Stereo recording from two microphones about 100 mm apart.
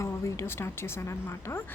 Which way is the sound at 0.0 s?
30° left (ahead or behind).